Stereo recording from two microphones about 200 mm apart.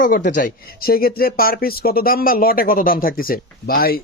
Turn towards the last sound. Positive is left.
turn(degrees=50)  # may be behind; listen again after turning